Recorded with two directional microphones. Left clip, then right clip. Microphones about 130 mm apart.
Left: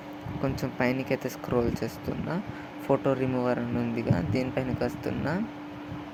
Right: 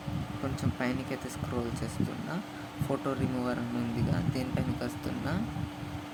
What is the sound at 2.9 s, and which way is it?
Speech, 30° left (ahead or behind).